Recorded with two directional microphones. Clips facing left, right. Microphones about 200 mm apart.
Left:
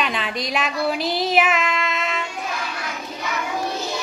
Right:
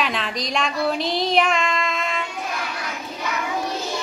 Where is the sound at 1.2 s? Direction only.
5° left (ahead or behind).